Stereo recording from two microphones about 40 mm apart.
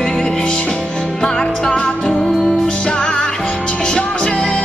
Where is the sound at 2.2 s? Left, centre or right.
Centre.